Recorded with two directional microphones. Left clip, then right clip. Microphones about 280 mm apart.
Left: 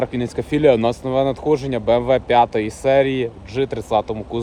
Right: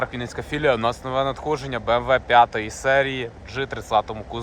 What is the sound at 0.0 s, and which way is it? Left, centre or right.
Speech, right.